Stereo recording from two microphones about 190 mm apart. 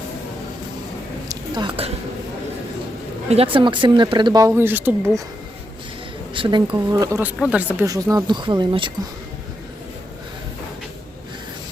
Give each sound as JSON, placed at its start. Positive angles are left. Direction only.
{"t": 1.3, "sound": "a sound", "side_deg": -25}
{"t": 3.2, "sound": "speech", "side_deg": -30}
{"t": 6.3, "sound": "speech", "side_deg": -25}
{"t": 6.7, "sound": "speech", "side_deg": -15}
{"t": 7.9, "sound": "speech", "side_deg": -20}